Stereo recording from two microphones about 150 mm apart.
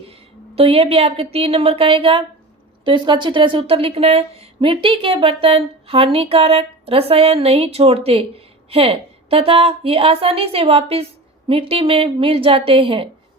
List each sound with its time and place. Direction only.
0.5 s speech: 40° right (ahead or behind)